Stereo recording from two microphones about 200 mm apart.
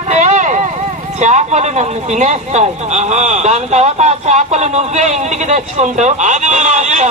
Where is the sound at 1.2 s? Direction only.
35° right (ahead or behind).